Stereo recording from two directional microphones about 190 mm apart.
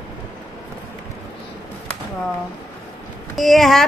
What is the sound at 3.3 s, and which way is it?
Mantra, centre (ahead or behind).